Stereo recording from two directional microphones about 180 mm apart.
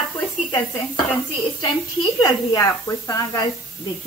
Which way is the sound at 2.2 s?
20° left (ahead or behind).